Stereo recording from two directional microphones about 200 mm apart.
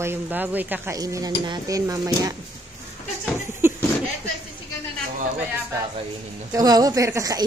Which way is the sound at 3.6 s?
10° right (ahead or behind).